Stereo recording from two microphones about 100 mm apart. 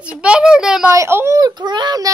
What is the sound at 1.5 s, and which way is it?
Speech, 45° right (ahead or behind).